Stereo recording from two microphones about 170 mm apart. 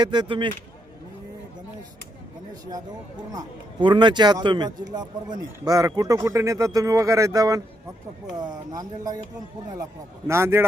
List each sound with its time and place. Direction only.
0.0 s a man's voice: 25° right (ahead or behind)
3.3 s a man's voice: 30° right (ahead or behind)
10.2 s a man's voice: 15° right (ahead or behind)